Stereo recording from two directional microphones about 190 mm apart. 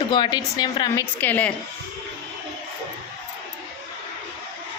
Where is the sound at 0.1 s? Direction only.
20° left (ahead or behind).